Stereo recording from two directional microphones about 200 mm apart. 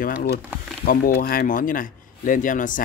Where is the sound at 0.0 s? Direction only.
45° left (ahead or behind).